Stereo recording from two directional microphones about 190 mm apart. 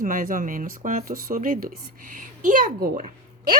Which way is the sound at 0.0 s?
45° right (ahead or behind).